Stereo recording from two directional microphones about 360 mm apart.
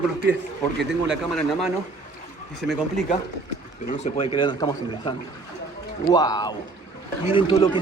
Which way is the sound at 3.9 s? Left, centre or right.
Centre.